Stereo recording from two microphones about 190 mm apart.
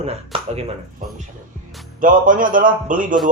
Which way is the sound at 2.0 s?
45° right (ahead or behind).